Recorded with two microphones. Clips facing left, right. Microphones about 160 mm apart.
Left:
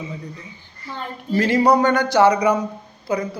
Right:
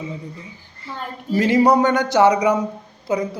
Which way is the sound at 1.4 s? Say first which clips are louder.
Right 1 dB; 20° right (ahead or behind).